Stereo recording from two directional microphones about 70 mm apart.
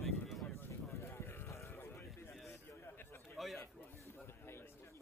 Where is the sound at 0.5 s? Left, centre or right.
Left.